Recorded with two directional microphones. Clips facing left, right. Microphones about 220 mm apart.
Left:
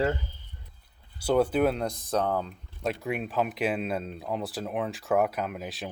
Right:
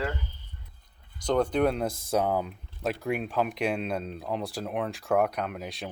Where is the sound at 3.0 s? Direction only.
Centre (ahead or behind).